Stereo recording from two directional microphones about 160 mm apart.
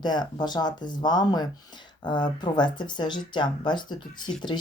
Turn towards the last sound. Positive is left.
turn(degrees=30)  # may be behind; listen again after turning